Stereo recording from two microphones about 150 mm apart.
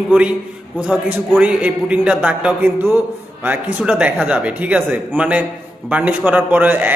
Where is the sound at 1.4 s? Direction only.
10° right (ahead or behind).